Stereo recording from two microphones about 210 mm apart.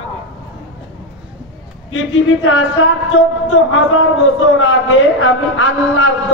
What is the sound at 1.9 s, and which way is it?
A man's voice, 70° left (ahead or behind).